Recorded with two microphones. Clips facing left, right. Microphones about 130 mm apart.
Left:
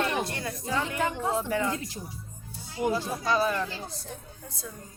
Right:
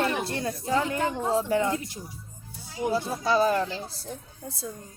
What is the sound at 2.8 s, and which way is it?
Speech, 30° right (ahead or behind).